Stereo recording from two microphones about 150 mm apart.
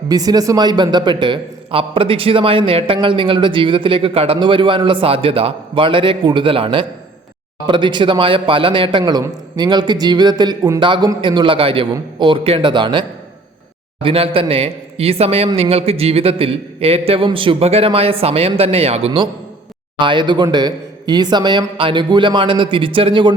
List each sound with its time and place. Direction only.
0.1 s a man's voice: 25° right (ahead or behind)